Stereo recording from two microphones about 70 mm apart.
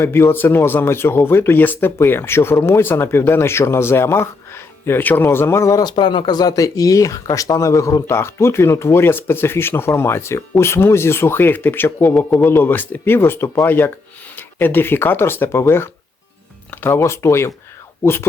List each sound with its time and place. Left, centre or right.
0.0 s speech: left
5.8 s speech: left
12.0 s a man's voice: left
17.0 s speech: left